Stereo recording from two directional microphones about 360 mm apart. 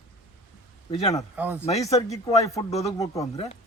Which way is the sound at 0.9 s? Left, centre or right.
Centre.